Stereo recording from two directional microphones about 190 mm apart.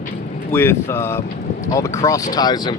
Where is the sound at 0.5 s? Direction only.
10° left (ahead or behind).